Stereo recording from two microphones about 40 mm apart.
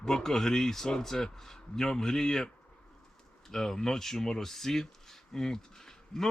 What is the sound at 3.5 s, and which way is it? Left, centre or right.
Speech, centre.